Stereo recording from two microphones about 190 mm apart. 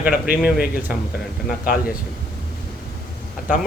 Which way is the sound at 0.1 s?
50° left (ahead or behind).